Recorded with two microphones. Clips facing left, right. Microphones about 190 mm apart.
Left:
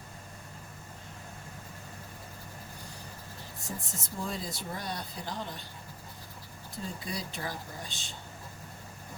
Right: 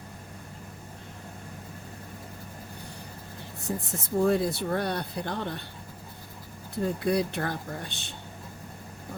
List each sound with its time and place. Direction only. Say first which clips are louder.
3.7 s speech: right 10 dB; 60° right (ahead or behind)
6.7 s speech: right 13 dB; 60° right (ahead or behind)